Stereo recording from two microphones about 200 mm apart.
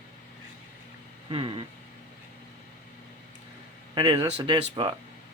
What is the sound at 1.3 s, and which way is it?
Speech, 25° right (ahead or behind).